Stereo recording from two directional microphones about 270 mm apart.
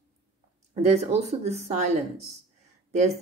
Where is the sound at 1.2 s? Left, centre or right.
Right.